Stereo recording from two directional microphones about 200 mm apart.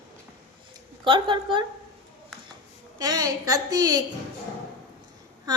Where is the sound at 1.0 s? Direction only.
25° right (ahead or behind).